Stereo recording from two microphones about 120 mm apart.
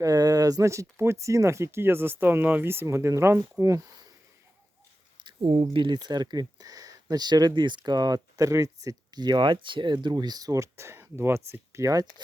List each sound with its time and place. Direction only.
0.0 s speech: 30° right (ahead or behind)
5.2 s a sound: 55° right (ahead or behind)
5.7 s speech: 40° right (ahead or behind); by 12.0 s 25° right (ahead or behind)